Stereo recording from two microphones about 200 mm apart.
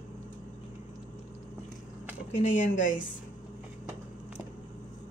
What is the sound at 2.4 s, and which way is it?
Speech, 40° left (ahead or behind).